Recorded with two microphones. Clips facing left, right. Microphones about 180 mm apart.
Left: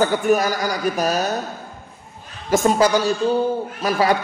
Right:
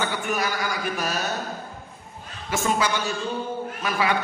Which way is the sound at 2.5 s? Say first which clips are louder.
Left 8 dB; 40° left (ahead or behind).